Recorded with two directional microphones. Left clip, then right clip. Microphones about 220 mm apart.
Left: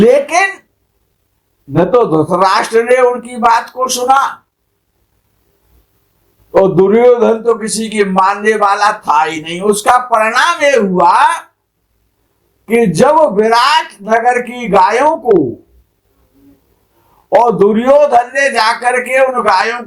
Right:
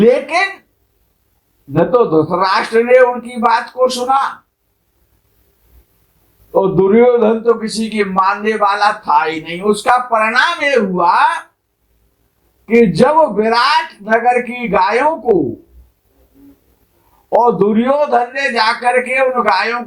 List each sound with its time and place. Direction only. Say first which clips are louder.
0.0 s speech: left 3 dB; 35° left (ahead or behind)
1.7 s a man's voice: left 2 dB; 30° left (ahead or behind)
6.5 s a man's voice: left 3 dB; 30° left (ahead or behind)
12.6 s a man's voice: left 1 dB; 30° left (ahead or behind)
17.2 s a man's voice: left 3 dB; 35° left (ahead or behind)